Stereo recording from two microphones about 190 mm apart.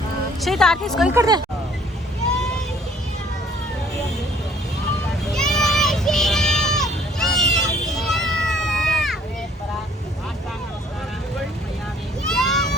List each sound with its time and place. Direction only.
0.4 s speech: centre (ahead or behind)
1.1 s speech: 20° right (ahead or behind)
5.2 s a sound: centre (ahead or behind)
7.9 s run: centre (ahead or behind)
12.3 s vehicle: centre (ahead or behind)